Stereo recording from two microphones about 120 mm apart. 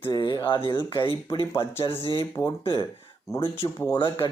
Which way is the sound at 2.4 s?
45° left (ahead or behind).